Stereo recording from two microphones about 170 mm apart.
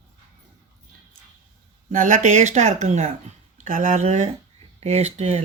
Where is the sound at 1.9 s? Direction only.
45° right (ahead or behind).